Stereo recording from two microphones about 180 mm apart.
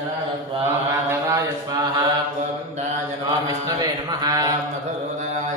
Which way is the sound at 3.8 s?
20° right (ahead or behind).